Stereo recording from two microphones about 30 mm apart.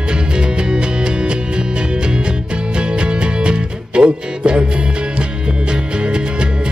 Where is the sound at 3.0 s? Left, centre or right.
Right.